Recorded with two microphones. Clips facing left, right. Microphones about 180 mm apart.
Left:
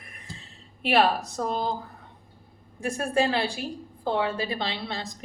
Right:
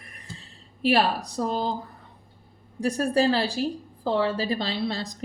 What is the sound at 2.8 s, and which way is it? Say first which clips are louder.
A woman's voice: right 3 dB; 35° right (ahead or behind).